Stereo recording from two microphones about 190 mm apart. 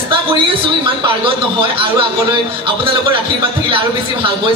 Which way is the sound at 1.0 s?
25° right (ahead or behind).